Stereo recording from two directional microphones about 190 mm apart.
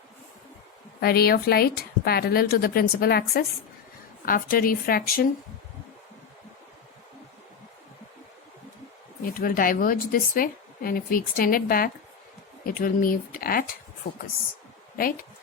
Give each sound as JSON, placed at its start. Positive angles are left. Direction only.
{"t": 1.0, "sound": "speech", "side_deg": 55}
{"t": 9.3, "sound": "speech", "side_deg": 50}
{"t": 14.9, "sound": "speech", "side_deg": 50}